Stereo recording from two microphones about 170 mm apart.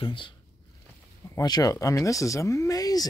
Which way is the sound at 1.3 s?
20° left (ahead or behind).